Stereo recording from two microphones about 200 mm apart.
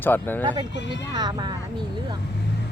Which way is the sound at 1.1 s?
20° right (ahead or behind).